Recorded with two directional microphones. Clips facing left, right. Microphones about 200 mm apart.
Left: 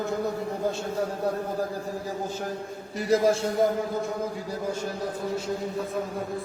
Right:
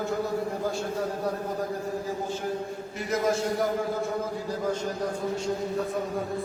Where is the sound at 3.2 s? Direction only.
30° left (ahead or behind).